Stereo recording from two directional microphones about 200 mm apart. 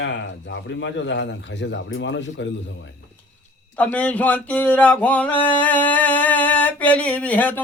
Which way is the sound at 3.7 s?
5° left (ahead or behind).